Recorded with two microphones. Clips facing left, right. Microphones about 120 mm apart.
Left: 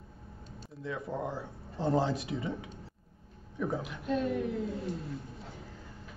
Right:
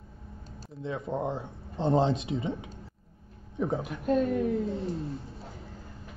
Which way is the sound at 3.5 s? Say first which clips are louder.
Right 4 dB; 25° right (ahead or behind).